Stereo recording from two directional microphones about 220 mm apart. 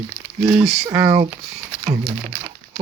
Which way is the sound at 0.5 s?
Centre (ahead or behind).